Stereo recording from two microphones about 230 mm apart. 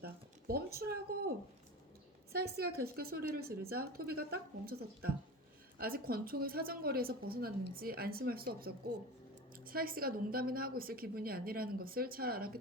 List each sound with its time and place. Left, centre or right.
0.0 s speech: right
2.3 s a woman's voice: right